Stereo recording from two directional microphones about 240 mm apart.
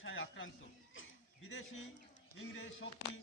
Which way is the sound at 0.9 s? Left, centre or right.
Left.